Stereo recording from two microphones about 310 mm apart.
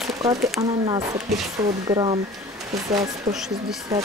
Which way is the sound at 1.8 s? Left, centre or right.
Centre.